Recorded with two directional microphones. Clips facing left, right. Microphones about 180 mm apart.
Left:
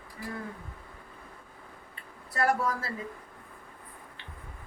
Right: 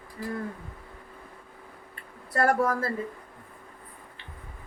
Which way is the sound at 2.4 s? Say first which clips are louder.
Right 4 dB; 55° right (ahead or behind).